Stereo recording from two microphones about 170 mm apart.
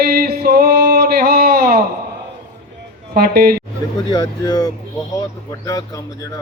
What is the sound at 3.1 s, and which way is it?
Speech, 65° right (ahead or behind).